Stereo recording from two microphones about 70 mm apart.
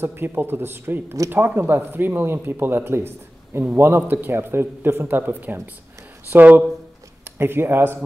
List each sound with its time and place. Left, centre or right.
0.0 s speech: right